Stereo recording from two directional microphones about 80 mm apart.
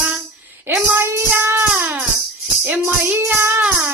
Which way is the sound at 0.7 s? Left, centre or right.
Right.